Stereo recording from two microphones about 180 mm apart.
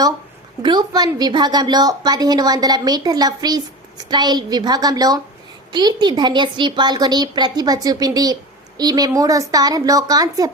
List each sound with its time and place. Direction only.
0.6 s a woman's voice: 25° right (ahead or behind)